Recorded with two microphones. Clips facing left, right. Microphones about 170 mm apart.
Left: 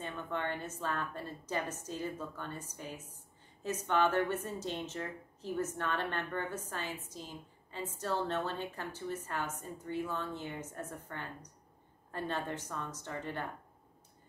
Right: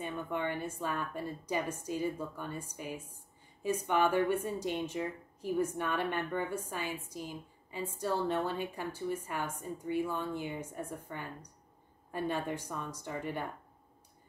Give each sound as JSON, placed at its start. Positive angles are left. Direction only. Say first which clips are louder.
{"t": 0.0, "sound": "a woman's voice", "louder": "right 2 dB", "side_deg": -10}